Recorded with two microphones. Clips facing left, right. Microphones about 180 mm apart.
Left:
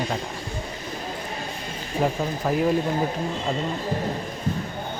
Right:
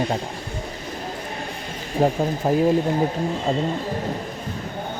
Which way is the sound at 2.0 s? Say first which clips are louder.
Right 4 dB; 35° right (ahead or behind).